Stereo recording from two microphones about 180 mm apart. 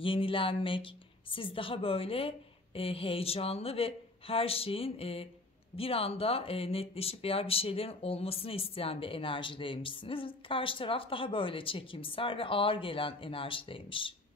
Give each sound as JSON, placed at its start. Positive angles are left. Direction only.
{"t": 0.0, "sound": "a woman's voice", "side_deg": 30}